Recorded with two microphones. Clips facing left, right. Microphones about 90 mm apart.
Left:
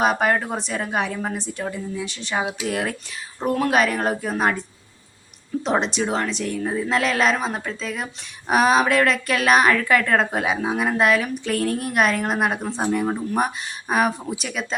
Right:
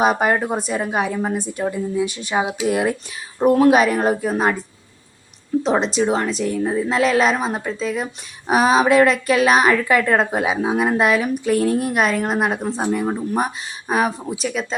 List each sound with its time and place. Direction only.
0.0 s a woman's voice: 5° right (ahead or behind)
2.5 s speech: 25° right (ahead or behind)
3.7 s a woman's voice: 5° right (ahead or behind)
5.6 s a woman's voice: centre (ahead or behind)